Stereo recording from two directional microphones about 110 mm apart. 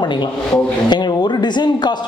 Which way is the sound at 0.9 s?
40° left (ahead or behind).